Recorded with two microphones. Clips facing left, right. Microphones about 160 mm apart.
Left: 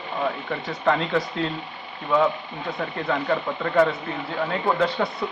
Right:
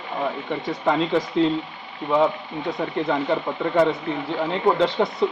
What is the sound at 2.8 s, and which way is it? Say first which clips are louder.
Speech: right 3 dB; 15° right (ahead or behind).